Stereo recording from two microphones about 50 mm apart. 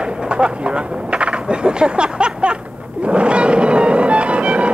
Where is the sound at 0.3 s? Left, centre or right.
Centre.